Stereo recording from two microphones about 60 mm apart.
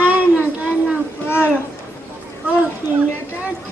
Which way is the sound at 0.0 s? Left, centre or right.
Right.